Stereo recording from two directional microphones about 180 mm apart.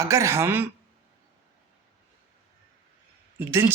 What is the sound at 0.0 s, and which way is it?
Speech, 15° right (ahead or behind).